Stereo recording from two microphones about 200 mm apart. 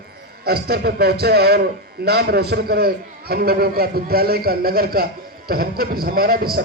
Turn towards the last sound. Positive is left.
turn(degrees=-50)  # may be behind; listen again after turning